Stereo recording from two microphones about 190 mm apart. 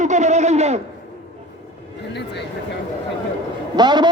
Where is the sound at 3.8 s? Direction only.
25° right (ahead or behind).